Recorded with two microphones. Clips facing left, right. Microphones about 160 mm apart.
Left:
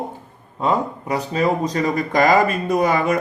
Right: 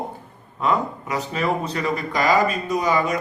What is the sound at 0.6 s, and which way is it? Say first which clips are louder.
A man's voice: left 2 dB; 30° left (ahead or behind).